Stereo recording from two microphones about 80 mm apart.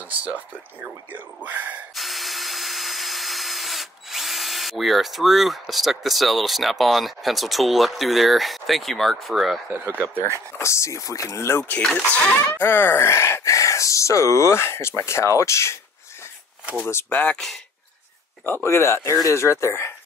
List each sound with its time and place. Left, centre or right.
0.2 s speech: right
2.0 s tools: centre
10.1 s speech: right
10.6 s speech: left
16.8 s speech: left
18.4 s speech: left